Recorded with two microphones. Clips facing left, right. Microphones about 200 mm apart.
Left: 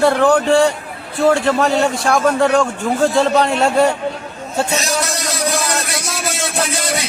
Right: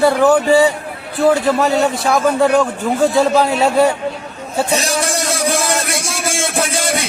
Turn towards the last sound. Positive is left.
turn(degrees=-25)  # may be behind; listen again after turning